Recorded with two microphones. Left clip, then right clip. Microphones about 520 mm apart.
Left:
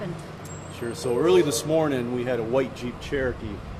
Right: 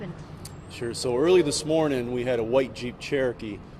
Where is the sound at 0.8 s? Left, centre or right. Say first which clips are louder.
Even; right.